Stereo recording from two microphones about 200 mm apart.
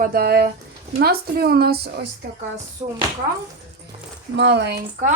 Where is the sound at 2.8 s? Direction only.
15° right (ahead or behind).